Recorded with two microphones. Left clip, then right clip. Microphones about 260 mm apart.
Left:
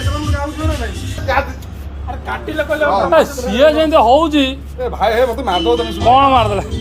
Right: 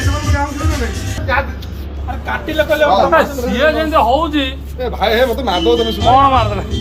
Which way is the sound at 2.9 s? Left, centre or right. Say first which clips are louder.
Right 1 dB; left.